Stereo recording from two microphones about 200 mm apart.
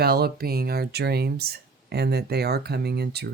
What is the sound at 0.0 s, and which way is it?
Speech, 50° right (ahead or behind).